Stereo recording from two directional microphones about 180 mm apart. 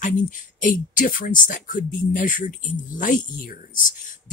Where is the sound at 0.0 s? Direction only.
45° left (ahead or behind).